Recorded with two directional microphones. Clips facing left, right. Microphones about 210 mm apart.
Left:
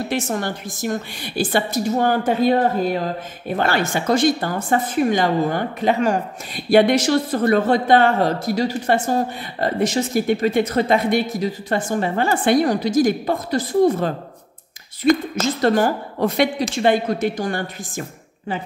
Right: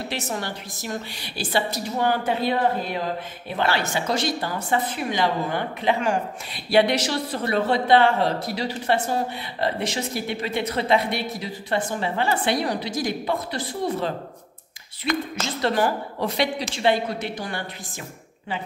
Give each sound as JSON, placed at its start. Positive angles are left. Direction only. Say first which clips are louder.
{"t": 0.1, "sound": "a woman's voice", "louder": "left 6 dB", "side_deg": 50}